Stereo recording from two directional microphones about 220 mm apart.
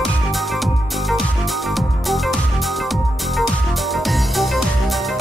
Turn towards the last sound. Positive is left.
turn(degrees=0)  # may be behind; listen again after turning